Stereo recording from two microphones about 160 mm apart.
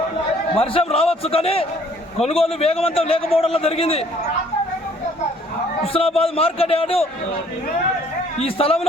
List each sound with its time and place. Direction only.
0.5 s a man's voice: 40° left (ahead or behind)
5.8 s a man's voice: 35° left (ahead or behind)
8.4 s a man's voice: 40° left (ahead or behind)